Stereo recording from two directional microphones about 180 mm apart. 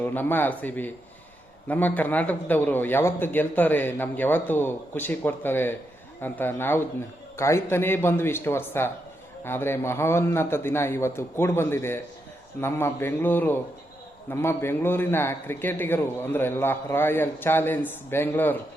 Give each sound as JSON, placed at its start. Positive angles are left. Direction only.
{"t": 0.0, "sound": "a man's voice", "side_deg": 10}